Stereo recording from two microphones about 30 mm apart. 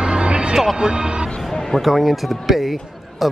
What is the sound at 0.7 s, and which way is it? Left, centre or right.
Speech, right.